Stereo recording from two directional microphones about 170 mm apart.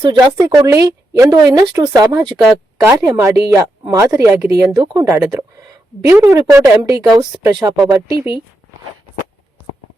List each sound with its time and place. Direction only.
0.0 s a woman's voice: 25° right (ahead or behind)
4.8 s speech: 25° right (ahead or behind)
5.0 s a woman's voice: 15° right (ahead or behind)